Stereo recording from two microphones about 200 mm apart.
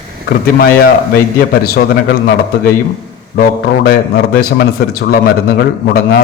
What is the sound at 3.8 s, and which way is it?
A man's voice, 50° left (ahead or behind).